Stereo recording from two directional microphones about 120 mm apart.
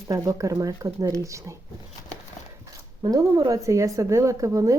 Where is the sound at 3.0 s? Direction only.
30° right (ahead or behind).